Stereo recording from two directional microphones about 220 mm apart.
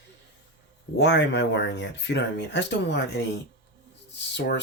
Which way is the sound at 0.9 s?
50° left (ahead or behind).